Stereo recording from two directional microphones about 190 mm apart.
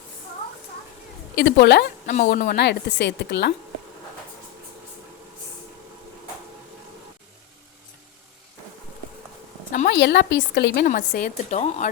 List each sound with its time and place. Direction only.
1.4 s a woman's voice: 65° left (ahead or behind)
2.0 s a woman's voice: 50° left (ahead or behind)
9.9 s a woman's voice: 65° left (ahead or behind)
10.8 s a woman's voice: 45° left (ahead or behind)